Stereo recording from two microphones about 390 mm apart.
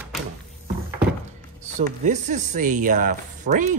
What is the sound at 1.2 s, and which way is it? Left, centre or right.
A man's voice, centre.